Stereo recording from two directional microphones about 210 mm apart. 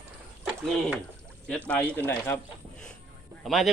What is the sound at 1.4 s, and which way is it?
Speech, 5° left (ahead or behind).